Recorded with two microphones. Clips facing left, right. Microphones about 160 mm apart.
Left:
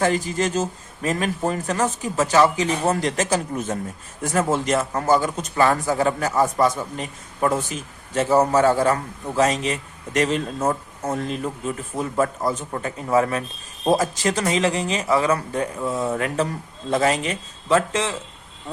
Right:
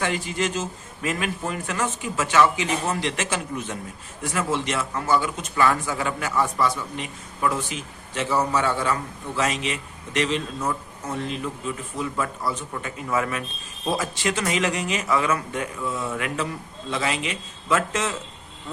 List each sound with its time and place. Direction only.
0.0 s a man's voice: 40° left (ahead or behind)